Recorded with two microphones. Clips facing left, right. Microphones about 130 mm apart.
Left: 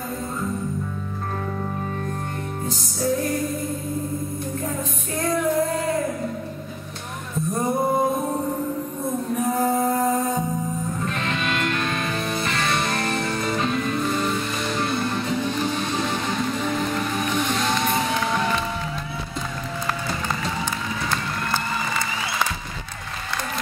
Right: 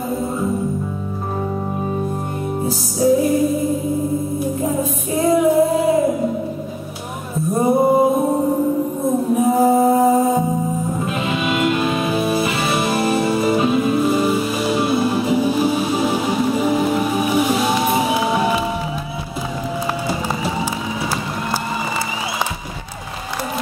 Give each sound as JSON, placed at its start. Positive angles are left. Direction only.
{"t": 2.6, "sound": "music", "side_deg": -10}
{"t": 5.1, "sound": "music", "side_deg": -5}
{"t": 7.8, "sound": "music", "side_deg": -10}
{"t": 8.2, "sound": "music", "side_deg": -25}
{"t": 9.3, "sound": "music", "side_deg": -5}